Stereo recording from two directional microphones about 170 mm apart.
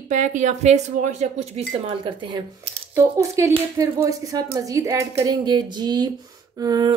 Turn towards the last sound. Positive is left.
turn(degrees=-20)  # may be behind; listen again after turning